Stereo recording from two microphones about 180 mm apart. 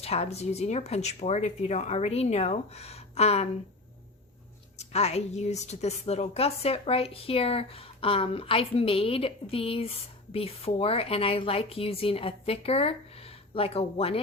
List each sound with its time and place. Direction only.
0.0 s a woman's voice: 35° left (ahead or behind)
4.8 s a woman's voice: 35° left (ahead or behind)